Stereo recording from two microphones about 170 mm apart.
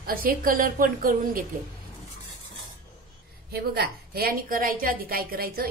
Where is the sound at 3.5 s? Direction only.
65° right (ahead or behind).